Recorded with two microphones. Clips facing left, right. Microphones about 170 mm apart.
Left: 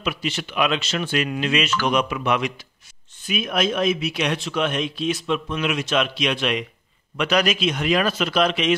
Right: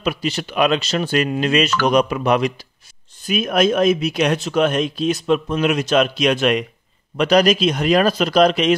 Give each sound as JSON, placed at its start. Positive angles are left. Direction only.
{"t": 0.0, "sound": "speech", "side_deg": -40}